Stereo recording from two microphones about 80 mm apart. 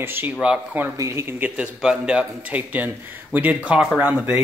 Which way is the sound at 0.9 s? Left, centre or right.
Right.